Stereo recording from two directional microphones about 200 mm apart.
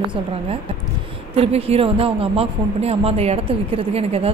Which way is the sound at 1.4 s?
30° right (ahead or behind).